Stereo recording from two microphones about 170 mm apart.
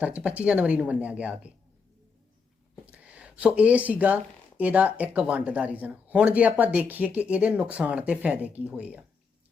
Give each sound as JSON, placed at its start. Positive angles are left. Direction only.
{"t": 0.0, "sound": "speech", "side_deg": -5}
{"t": 2.9, "sound": "speech", "side_deg": -5}